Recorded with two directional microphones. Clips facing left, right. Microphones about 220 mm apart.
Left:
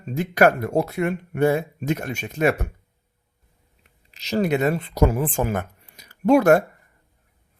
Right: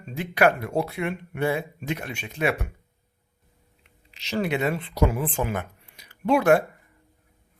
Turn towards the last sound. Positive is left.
turn(degrees=45)  # may be behind; listen again after turning